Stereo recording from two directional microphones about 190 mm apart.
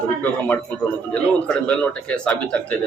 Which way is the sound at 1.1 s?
5° left (ahead or behind).